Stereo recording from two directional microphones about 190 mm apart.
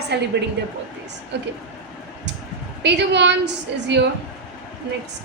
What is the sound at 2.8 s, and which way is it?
A woman's voice, 65° right (ahead or behind).